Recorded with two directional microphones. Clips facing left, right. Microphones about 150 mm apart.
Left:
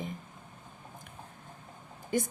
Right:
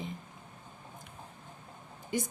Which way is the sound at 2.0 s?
45° left (ahead or behind).